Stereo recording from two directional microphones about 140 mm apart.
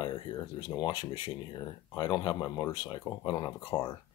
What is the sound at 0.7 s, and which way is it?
Speech, 30° left (ahead or behind).